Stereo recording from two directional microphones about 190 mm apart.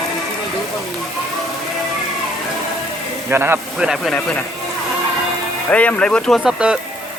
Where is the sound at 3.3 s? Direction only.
10° right (ahead or behind).